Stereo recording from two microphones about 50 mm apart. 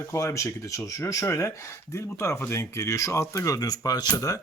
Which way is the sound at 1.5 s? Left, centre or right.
Left.